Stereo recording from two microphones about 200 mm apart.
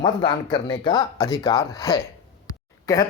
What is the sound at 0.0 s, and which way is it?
Speech, 20° left (ahead or behind).